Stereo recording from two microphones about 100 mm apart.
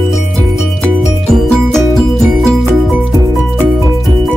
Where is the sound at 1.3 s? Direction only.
5° left (ahead or behind).